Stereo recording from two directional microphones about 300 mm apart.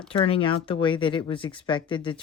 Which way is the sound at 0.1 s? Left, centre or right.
Centre.